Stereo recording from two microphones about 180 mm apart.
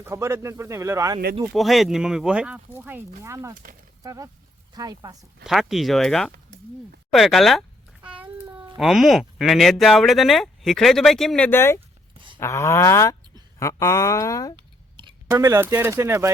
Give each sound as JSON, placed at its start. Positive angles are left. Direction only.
{"t": 0.0, "sound": "speech", "side_deg": -15}
{"t": 1.5, "sound": "speech", "side_deg": 0}
{"t": 3.5, "sound": "speech", "side_deg": -50}
{"t": 4.0, "sound": "speech", "side_deg": -20}
{"t": 5.4, "sound": "speech", "side_deg": 0}
{"t": 8.2, "sound": "babbling", "side_deg": -10}
{"t": 8.8, "sound": "speech", "side_deg": 0}
{"t": 14.5, "sound": "a sound", "side_deg": -25}
{"t": 15.3, "sound": "speech", "side_deg": -15}